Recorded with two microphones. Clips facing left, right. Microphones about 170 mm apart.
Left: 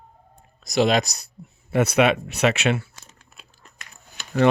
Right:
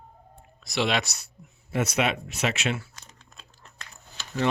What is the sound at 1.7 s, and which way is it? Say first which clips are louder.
Speech: left 7 dB; 60° left (ahead or behind).